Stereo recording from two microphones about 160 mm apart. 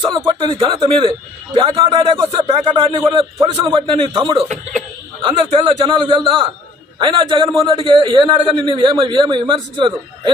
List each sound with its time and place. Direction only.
0.3 s speech: 30° right (ahead or behind)
5.2 s a sound: 35° right (ahead or behind)
5.7 s a man's voice: 30° right (ahead or behind)